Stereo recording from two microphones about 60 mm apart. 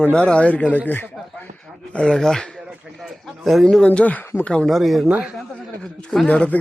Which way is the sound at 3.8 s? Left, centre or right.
Left.